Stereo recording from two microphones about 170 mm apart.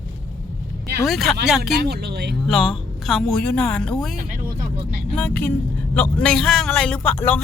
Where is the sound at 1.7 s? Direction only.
70° right (ahead or behind).